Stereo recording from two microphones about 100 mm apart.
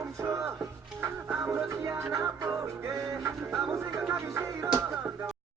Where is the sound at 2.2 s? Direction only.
30° right (ahead or behind).